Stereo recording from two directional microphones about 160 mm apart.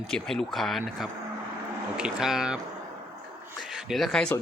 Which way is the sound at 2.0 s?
5° right (ahead or behind).